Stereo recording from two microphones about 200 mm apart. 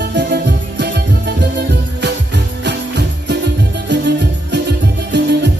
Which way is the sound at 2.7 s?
60° right (ahead or behind).